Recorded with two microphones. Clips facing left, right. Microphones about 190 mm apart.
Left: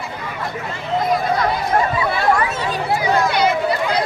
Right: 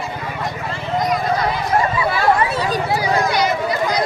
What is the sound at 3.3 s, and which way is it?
Run, 60° left (ahead or behind).